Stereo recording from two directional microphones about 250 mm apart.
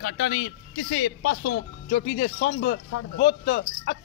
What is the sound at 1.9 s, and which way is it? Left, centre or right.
Speech, left.